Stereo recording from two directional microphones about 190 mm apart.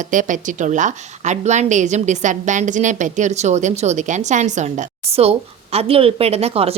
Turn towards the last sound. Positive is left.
turn(degrees=-30)  # may be behind; listen again after turning